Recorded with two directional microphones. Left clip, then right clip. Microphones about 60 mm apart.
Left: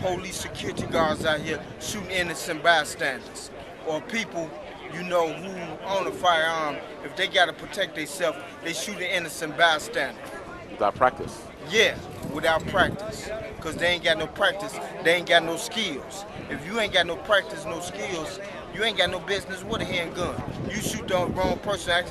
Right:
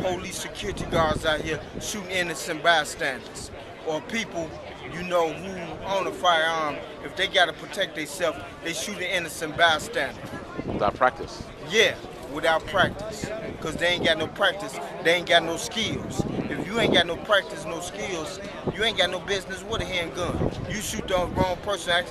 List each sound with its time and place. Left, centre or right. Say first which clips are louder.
0.0 s speech: even; centre
10.8 s speech: left 1 dB; left
11.7 s speech: even; centre